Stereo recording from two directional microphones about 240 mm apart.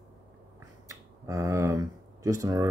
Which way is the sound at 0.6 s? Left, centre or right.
Centre.